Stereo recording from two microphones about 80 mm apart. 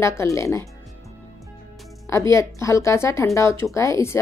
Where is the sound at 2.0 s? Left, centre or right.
Left.